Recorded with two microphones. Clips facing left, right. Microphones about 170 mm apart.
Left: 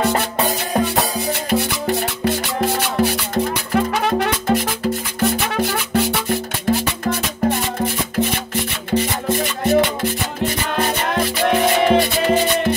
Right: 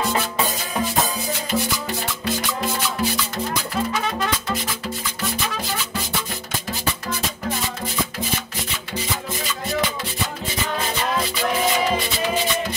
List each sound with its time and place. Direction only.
0.0 s music: 65° left (ahead or behind)